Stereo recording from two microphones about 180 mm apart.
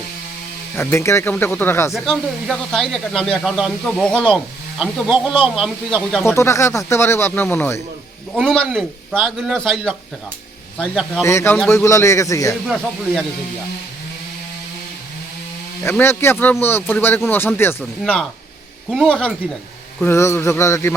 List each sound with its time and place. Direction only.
0.8 s speech: 15° left (ahead or behind)
4.8 s speech: 5° right (ahead or behind)
6.2 s speech: 15° left (ahead or behind)
8.4 s speech: centre (ahead or behind)
11.2 s speech: 15° left (ahead or behind)
12.6 s speech: centre (ahead or behind)
15.8 s speech: 10° left (ahead or behind)